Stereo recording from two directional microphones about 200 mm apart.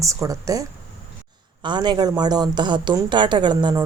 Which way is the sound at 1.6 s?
20° right (ahead or behind).